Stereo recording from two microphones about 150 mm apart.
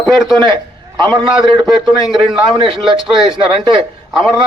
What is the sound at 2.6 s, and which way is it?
Speech, 35° right (ahead or behind).